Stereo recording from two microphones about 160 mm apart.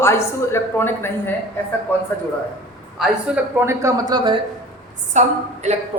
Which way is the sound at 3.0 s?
5° right (ahead or behind).